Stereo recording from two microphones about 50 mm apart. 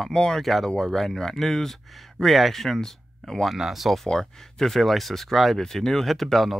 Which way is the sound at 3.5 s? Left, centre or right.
Centre.